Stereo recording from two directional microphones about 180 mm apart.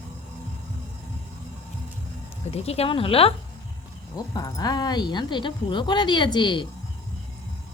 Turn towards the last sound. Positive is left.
turn(degrees=25)  # may be behind; listen again after turning